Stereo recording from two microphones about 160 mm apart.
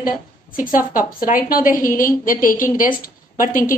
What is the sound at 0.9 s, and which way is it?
A woman's voice, 60° left (ahead or behind).